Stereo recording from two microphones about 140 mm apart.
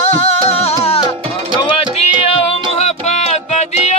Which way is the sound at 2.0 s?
45° left (ahead or behind).